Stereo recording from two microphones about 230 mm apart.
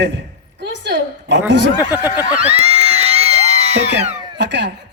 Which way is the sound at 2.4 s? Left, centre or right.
Right.